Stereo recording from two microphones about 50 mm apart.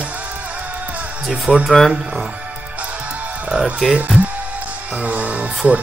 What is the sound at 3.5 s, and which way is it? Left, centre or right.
Speech, centre.